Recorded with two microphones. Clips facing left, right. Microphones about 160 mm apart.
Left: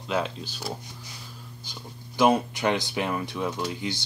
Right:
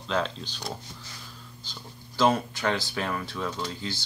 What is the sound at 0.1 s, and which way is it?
Speech, 10° left (ahead or behind).